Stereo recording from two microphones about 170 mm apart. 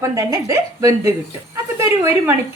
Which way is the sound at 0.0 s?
20° right (ahead or behind).